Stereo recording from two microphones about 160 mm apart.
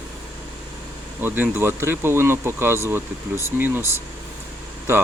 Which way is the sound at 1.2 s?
10° right (ahead or behind).